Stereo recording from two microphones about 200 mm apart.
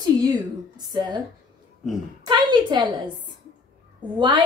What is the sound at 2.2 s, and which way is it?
A woman's voice, 20° right (ahead or behind).